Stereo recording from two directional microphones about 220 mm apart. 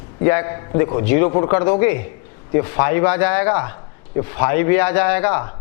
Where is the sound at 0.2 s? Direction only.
20° left (ahead or behind).